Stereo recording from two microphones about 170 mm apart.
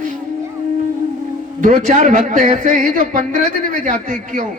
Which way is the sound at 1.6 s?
50° right (ahead or behind).